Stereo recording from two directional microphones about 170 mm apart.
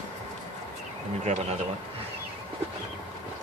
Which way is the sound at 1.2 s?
40° right (ahead or behind).